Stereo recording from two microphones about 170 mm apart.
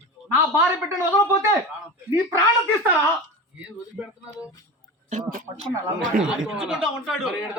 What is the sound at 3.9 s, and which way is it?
Speech, 5° right (ahead or behind).